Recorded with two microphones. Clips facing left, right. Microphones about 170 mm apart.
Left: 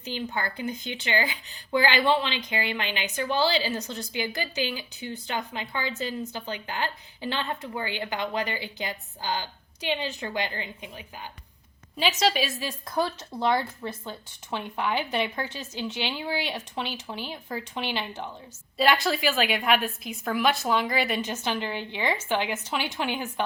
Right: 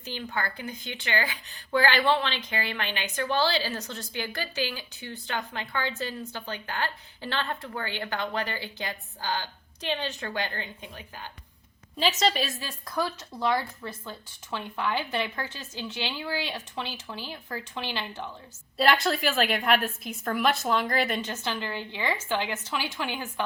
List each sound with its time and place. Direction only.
0.0 s a woman's voice: 20° left (ahead or behind)
12.5 s speech: 20° left (ahead or behind)
18.8 s a woman's voice: centre (ahead or behind)
21.2 s speech: 15° left (ahead or behind)